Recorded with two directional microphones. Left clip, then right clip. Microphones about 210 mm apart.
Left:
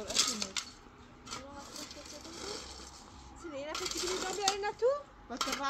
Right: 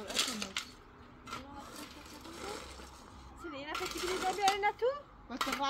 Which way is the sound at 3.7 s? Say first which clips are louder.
Even; 15° left (ahead or behind).